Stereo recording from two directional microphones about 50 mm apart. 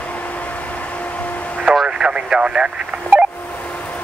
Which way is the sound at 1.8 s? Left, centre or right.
Centre.